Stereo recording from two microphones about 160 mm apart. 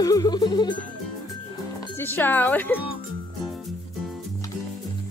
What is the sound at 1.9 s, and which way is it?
Speech, 10° left (ahead or behind).